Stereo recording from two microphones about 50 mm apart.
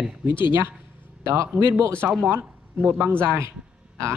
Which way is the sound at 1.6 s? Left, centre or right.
Right.